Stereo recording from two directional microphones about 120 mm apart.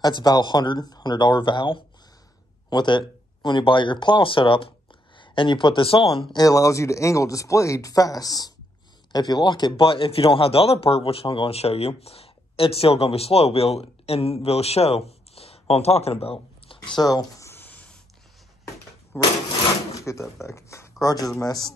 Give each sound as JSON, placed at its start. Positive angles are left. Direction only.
{"t": 0.0, "sound": "speech", "side_deg": 35}
{"t": 6.3, "sound": "speech", "side_deg": 30}
{"t": 17.0, "sound": "a sound", "side_deg": 30}
{"t": 19.1, "sound": "a sound", "side_deg": 20}
{"t": 19.9, "sound": "drawer open or close", "side_deg": 25}
{"t": 20.4, "sound": "speech", "side_deg": 25}